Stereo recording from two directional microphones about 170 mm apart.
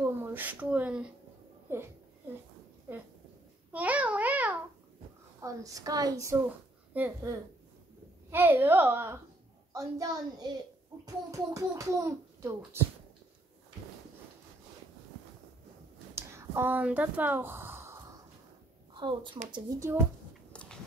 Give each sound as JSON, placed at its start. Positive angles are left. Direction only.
{"t": 0.0, "sound": "a child's voice", "side_deg": -10}
{"t": 2.9, "sound": "speech", "side_deg": -10}
{"t": 3.7, "sound": "babbling", "side_deg": -10}
{"t": 5.4, "sound": "a woman's voice", "side_deg": -20}
{"t": 6.9, "sound": "a child's voice", "side_deg": -10}
{"t": 16.2, "sound": "speech", "side_deg": -15}
{"t": 18.9, "sound": "a woman's voice", "side_deg": -30}